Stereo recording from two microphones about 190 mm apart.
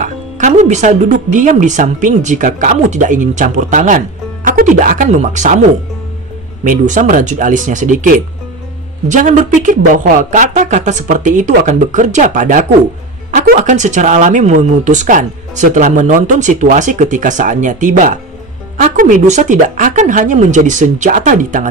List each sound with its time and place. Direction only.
0.0 s speech: 40° right (ahead or behind)